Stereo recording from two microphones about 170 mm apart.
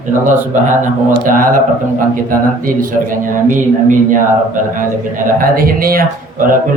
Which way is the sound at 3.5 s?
50° right (ahead or behind).